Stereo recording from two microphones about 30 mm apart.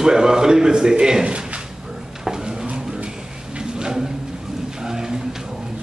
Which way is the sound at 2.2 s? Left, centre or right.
Centre.